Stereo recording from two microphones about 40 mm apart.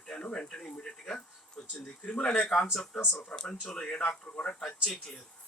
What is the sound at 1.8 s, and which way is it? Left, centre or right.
Speech, left.